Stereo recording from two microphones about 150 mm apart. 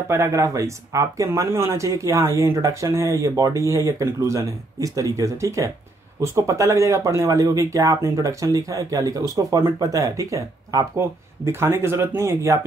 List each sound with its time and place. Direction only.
0.1 s speech: 20° right (ahead or behind)